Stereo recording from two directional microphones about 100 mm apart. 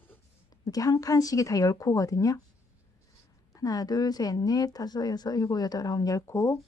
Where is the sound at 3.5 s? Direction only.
35° left (ahead or behind).